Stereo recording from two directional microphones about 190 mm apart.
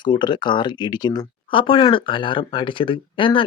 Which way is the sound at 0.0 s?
25° left (ahead or behind).